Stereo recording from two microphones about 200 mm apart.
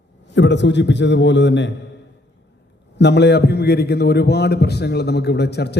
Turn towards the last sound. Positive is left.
turn(degrees=55)  # may be behind; listen again after turning